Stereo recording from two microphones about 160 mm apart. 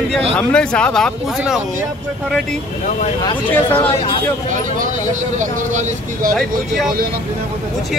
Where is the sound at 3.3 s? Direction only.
35° left (ahead or behind).